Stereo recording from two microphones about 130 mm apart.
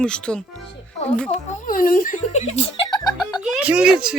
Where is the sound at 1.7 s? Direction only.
90° left; by 2.9 s 55° left (ahead or behind).